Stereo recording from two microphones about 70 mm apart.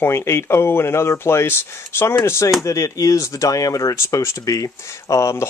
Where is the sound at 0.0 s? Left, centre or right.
Left.